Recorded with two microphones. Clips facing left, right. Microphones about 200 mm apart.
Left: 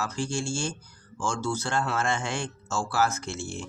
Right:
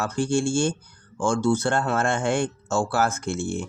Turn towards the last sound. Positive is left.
turn(degrees=-55)  # may be behind; listen again after turning